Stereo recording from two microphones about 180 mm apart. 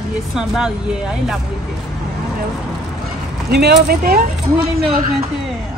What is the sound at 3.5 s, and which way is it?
Speech, 65° right (ahead or behind).